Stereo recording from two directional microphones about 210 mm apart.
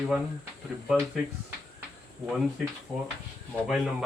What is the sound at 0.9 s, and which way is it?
Speech, 5° right (ahead or behind).